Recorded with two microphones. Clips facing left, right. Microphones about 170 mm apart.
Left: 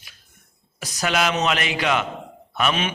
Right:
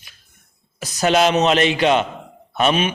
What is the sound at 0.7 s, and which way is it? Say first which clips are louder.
Mantra: right 7 dB; 30° right (ahead or behind).